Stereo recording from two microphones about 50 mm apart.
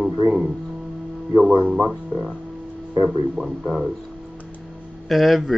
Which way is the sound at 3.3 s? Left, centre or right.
Centre.